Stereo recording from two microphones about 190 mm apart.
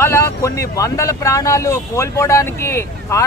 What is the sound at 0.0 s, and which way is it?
Speech, 15° left (ahead or behind).